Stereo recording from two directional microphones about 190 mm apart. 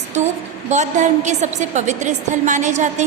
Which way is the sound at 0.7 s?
40° right (ahead or behind).